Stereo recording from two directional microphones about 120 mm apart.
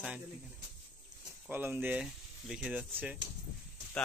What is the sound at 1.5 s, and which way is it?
Speech, 15° right (ahead or behind).